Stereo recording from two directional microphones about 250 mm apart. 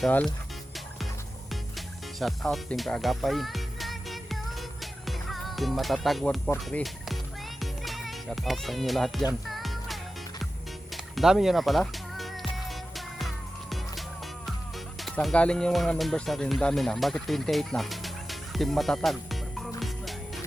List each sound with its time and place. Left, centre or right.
0.0 s speech: centre
2.1 s speech: centre
4.8 s music: centre
15.0 s speech: centre